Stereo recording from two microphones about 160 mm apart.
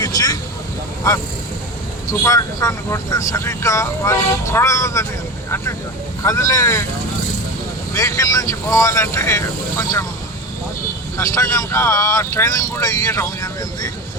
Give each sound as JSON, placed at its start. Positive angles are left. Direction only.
{"t": 0.0, "sound": "vehicle", "side_deg": 25}
{"t": 2.2, "sound": "speech", "side_deg": 20}
{"t": 6.2, "sound": "speech", "side_deg": 20}
{"t": 7.9, "sound": "speech", "side_deg": 20}
{"t": 11.2, "sound": "speech", "side_deg": 20}